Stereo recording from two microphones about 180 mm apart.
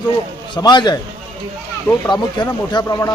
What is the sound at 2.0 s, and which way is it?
Speech, 25° left (ahead or behind).